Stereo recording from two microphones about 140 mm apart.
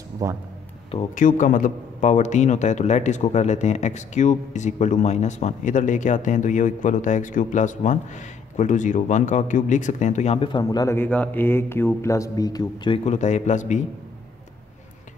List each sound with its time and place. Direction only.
0.2 s speech: 20° right (ahead or behind)
1.1 s a man's voice: 65° left (ahead or behind); by 10.6 s 45° left (ahead or behind)
10.6 s speech: 25° left (ahead or behind)
11.0 s speech: 10° left (ahead or behind); by 12.9 s 25° left (ahead or behind)
12.9 s a man's voice: 55° left (ahead or behind)